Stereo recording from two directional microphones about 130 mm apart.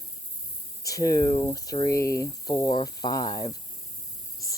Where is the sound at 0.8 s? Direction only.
25° left (ahead or behind).